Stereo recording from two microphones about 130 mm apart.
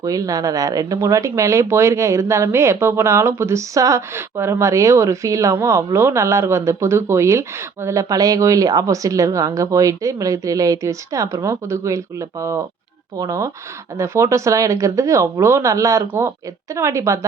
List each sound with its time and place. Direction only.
0.0 s speech: 25° right (ahead or behind)